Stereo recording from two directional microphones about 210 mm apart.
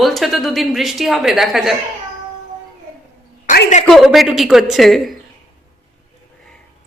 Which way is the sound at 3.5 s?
40° left (ahead or behind).